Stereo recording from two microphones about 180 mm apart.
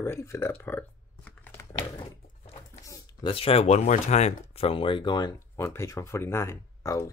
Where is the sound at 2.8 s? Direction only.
20° left (ahead or behind).